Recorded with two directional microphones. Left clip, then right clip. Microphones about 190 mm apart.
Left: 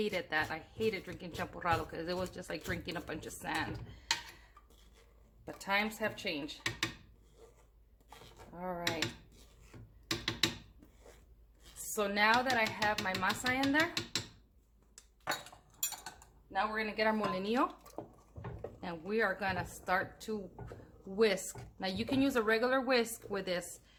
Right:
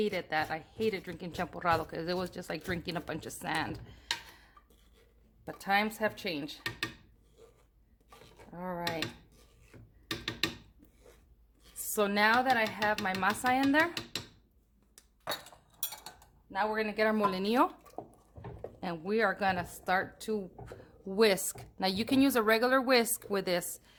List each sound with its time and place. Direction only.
0.0 s a woman's voice: 35° right (ahead or behind)
5.5 s a woman's voice: 50° right (ahead or behind)
8.5 s a woman's voice: 50° right (ahead or behind)
10.1 s mechanisms: 5° left (ahead or behind)
11.9 s a woman's voice: 50° right (ahead or behind)
16.5 s a woman's voice: 50° right (ahead or behind)
18.0 s a sound: 10° left (ahead or behind)
18.8 s a woman's voice: 45° right (ahead or behind)